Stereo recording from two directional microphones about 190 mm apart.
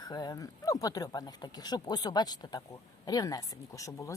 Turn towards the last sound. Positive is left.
turn(degrees=15)  # may be behind; listen again after turning